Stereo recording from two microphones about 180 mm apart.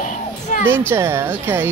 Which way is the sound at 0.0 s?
45° left (ahead or behind).